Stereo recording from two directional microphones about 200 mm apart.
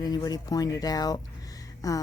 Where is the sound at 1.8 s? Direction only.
15° left (ahead or behind).